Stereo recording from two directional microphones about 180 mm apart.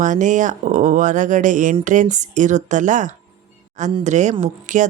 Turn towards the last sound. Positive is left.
turn(degrees=-45)  # may be behind; listen again after turning